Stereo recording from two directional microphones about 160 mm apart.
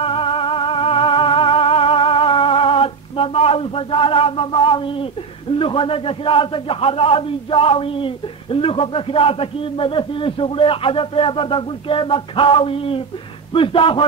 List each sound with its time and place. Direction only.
0.0 s music: 35° left (ahead or behind)
5.6 s a man's voice: 35° left (ahead or behind)